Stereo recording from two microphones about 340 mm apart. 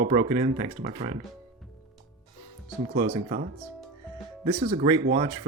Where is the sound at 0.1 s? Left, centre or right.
Centre.